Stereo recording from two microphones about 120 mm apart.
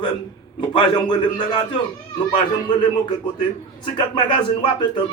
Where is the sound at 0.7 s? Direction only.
40° left (ahead or behind).